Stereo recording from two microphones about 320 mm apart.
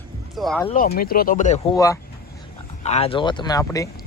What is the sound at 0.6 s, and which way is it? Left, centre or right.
Speech, left.